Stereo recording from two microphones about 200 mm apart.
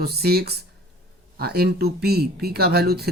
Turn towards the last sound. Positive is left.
turn(degrees=-55)  # may be behind; listen again after turning